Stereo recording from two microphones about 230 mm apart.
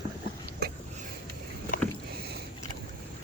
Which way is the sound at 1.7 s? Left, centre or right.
Left.